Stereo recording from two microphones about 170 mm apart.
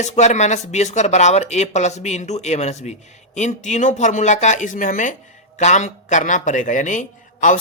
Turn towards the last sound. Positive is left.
turn(degrees=50)  # may be behind; listen again after turning